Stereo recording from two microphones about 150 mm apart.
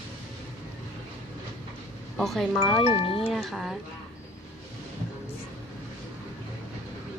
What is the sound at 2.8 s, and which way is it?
Speech, 40° left (ahead or behind).